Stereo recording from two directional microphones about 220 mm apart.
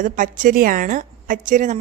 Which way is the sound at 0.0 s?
35° right (ahead or behind).